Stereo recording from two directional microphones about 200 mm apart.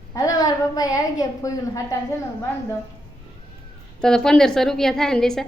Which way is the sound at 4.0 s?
5° left (ahead or behind).